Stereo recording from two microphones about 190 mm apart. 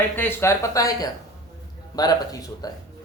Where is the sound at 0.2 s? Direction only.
15° left (ahead or behind).